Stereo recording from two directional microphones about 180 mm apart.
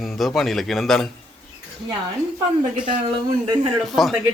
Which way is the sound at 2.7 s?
25° right (ahead or behind).